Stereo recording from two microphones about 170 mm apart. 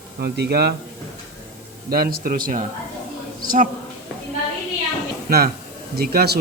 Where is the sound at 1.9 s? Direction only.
60° right (ahead or behind).